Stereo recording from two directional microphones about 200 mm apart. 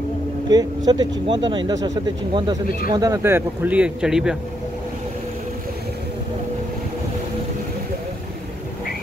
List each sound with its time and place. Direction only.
0.5 s speech: 20° right (ahead or behind); by 4.4 s 5° right (ahead or behind)